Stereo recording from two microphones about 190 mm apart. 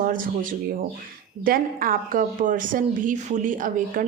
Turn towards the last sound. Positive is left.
turn(degrees=-45)  # may be behind; listen again after turning